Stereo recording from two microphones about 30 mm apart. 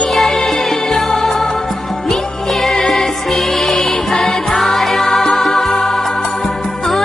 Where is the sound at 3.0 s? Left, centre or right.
Centre.